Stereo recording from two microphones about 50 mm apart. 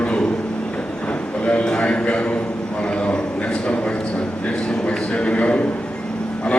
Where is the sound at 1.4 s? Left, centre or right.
Left.